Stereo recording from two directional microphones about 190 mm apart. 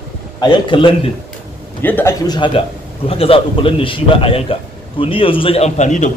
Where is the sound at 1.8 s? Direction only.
10° left (ahead or behind).